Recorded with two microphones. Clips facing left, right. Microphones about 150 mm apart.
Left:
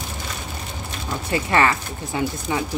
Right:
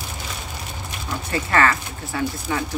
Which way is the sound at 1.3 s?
20° left (ahead or behind).